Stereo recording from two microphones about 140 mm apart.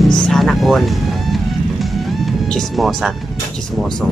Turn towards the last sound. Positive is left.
turn(degrees=5)  # may be behind; listen again after turning